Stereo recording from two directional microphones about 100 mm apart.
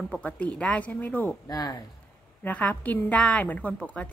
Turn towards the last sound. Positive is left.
turn(degrees=15)  # may be behind; listen again after turning